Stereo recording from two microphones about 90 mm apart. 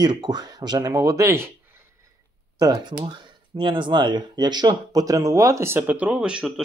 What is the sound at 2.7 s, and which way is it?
Speech, 65° right (ahead or behind).